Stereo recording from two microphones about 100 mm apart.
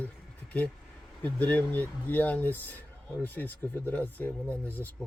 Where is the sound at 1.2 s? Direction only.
15° left (ahead or behind).